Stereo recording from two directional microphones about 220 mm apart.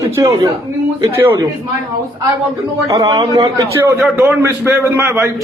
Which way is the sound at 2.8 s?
15° right (ahead or behind).